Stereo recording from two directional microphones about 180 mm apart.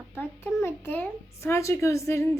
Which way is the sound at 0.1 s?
10° left (ahead or behind).